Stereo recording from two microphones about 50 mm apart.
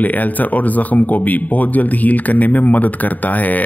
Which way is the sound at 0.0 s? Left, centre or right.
Left.